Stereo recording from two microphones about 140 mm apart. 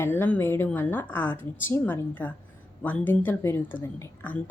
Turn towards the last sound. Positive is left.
turn(degrees=15)  # may be behind; listen again after turning